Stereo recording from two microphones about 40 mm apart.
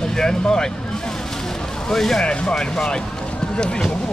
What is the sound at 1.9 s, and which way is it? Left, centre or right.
Speech, centre.